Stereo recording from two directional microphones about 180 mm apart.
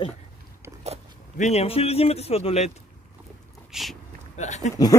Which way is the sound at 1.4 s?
35° left (ahead or behind).